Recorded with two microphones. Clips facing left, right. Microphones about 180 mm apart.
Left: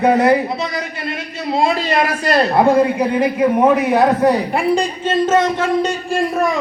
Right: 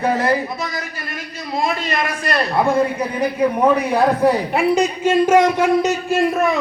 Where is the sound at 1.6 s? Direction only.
30° left (ahead or behind).